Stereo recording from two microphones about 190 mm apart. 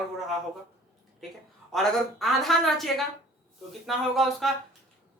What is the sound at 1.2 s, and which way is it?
A man's voice, centre (ahead or behind).